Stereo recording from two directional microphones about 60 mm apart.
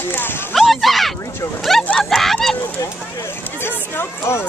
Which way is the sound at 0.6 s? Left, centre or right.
Centre.